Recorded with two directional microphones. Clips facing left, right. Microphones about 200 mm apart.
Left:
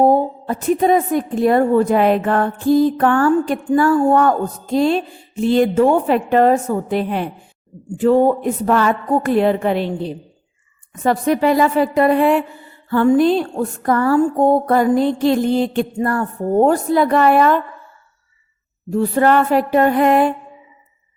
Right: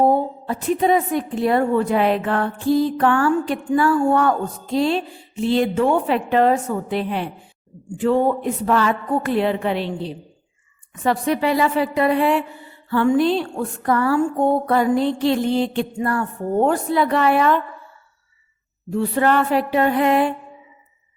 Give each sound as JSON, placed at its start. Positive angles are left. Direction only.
{"t": 0.0, "sound": "a woman's voice", "side_deg": 45}
{"t": 18.9, "sound": "a woman's voice", "side_deg": 40}